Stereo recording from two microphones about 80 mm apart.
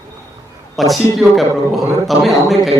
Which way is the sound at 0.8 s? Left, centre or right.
Centre.